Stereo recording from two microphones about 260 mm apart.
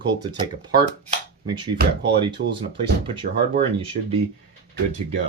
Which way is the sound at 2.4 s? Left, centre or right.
Right.